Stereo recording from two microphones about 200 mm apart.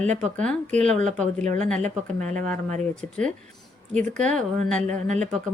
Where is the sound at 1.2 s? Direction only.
35° right (ahead or behind).